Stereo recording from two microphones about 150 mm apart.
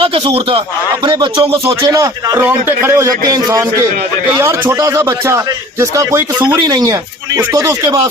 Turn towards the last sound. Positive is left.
turn(degrees=-20)  # may be behind; listen again after turning